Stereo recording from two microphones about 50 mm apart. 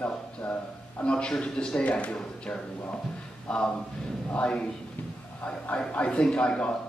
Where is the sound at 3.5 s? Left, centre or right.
Centre.